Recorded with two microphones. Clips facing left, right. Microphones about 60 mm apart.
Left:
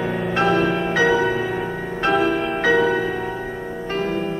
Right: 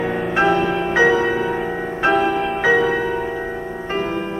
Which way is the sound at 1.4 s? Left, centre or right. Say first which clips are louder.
Right 3 dB; centre.